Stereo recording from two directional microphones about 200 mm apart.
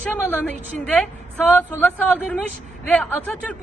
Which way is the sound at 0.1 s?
5° left (ahead or behind).